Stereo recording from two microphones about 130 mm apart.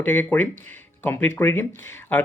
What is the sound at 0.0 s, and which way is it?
Speech, 15° left (ahead or behind).